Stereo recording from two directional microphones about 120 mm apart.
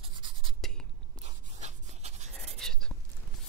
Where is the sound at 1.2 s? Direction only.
70° right (ahead or behind).